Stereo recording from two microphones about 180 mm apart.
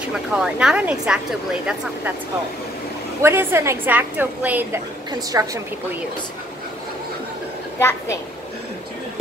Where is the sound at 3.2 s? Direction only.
15° right (ahead or behind).